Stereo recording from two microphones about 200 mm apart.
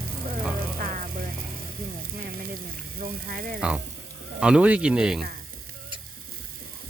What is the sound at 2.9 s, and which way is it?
Speech, 45° right (ahead or behind).